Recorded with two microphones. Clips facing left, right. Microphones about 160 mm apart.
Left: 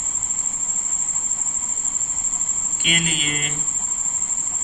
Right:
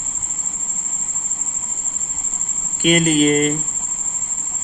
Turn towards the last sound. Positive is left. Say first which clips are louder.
# right 15 dB
turn(degrees=-45)  # may be behind; listen again after turning